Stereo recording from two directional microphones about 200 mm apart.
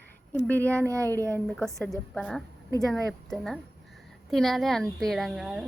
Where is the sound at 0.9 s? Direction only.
15° right (ahead or behind).